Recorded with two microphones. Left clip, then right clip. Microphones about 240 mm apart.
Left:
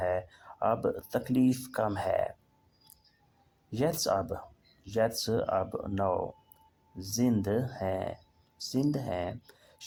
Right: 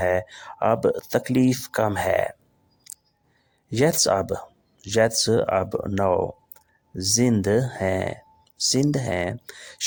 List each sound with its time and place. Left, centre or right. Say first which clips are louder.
0.0 s speech: right 9 dB; right
3.7 s speech: right 9 dB; right